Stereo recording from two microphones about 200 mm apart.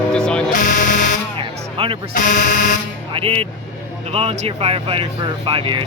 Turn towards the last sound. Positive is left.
turn(degrees=-25)  # may be behind; listen again after turning